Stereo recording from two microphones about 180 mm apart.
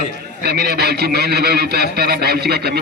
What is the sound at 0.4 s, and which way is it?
Speech, 60° right (ahead or behind).